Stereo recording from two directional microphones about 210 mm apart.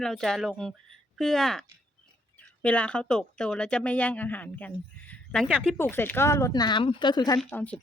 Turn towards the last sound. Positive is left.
turn(degrees=5)  # may be behind; listen again after turning